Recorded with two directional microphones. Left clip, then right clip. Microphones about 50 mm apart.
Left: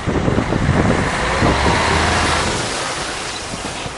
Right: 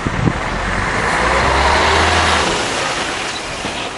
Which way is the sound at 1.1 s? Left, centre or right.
Right.